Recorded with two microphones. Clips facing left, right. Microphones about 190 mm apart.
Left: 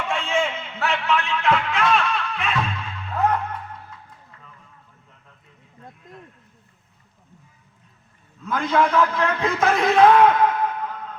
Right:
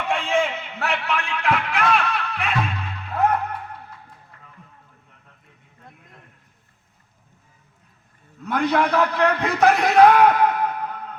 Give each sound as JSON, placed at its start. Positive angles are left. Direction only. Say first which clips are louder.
{"t": 0.1, "sound": "a sound", "louder": "right 3 dB", "side_deg": -35}
{"t": 2.0, "sound": "music", "louder": "even", "side_deg": -35}
{"t": 8.4, "sound": "a man's voice", "louder": "even", "side_deg": -35}